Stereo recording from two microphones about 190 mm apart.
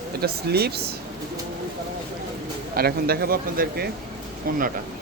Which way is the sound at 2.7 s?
55° right (ahead or behind).